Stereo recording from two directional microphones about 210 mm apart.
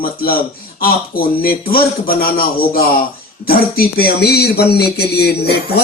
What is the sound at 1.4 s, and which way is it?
Speech, 45° left (ahead or behind).